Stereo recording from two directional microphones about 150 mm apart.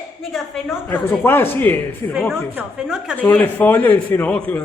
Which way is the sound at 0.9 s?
15° left (ahead or behind).